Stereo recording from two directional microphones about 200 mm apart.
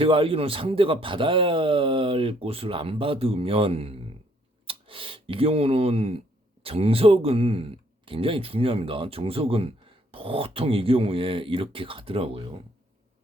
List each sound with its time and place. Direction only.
0.0 s a man's voice: 25° right (ahead or behind)